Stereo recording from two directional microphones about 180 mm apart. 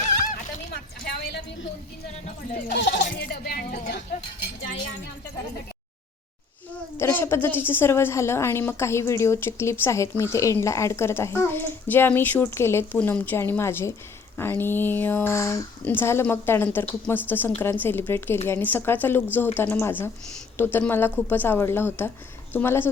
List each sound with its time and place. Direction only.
0.7 s a sound: 65° left (ahead or behind)
2.6 s speech: 80° left; by 4.0 s 55° left (ahead or behind)
6.9 s a woman's voice: 15° left (ahead or behind)